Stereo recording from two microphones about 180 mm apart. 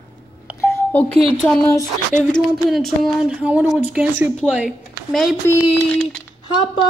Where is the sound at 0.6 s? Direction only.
10° left (ahead or behind).